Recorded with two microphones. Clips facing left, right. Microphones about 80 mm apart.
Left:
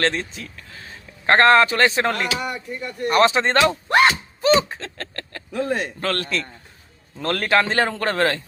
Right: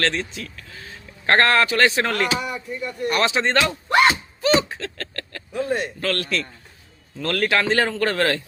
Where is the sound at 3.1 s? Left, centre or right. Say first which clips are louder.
Left 4 dB; left.